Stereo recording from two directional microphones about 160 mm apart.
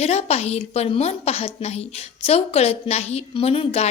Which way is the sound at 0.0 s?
40° left (ahead or behind).